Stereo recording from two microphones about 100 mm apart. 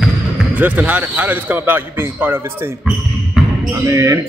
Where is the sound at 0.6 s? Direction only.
15° right (ahead or behind).